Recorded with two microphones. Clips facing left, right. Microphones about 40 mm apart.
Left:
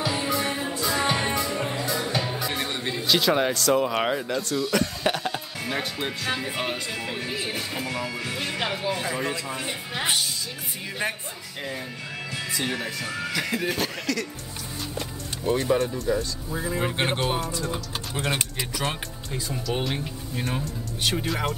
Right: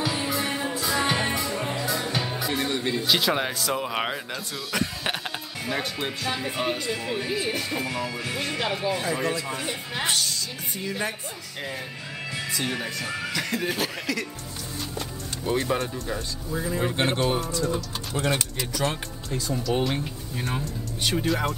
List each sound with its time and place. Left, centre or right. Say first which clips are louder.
0.0 s music: left 1 dB; centre
3.1 s speech: left 4 dB; centre
5.0 s music: left 4 dB; centre
5.7 s speech: even; centre
10.0 s speech: even; centre
12.4 s speech: left 1 dB; centre
16.5 s speech: right 1 dB; centre
19.8 s speech: right 2 dB; centre